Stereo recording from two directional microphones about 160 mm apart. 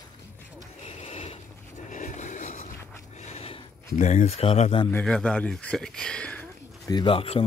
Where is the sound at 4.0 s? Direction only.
50° left (ahead or behind).